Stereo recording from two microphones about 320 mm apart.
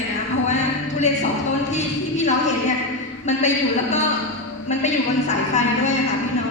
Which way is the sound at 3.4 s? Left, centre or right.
Left.